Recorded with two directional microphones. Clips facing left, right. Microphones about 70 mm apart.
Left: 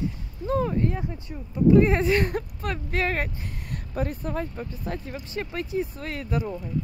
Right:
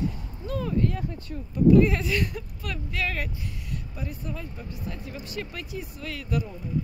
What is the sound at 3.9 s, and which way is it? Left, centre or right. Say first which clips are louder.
Speech: left 10 dB; left.